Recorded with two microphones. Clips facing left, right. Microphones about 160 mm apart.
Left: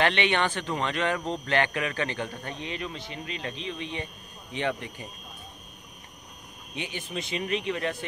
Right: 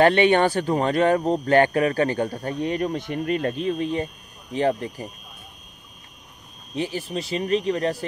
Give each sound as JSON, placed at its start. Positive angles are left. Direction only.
{"t": 0.0, "sound": "speech", "side_deg": -40}
{"t": 6.7, "sound": "speech", "side_deg": -35}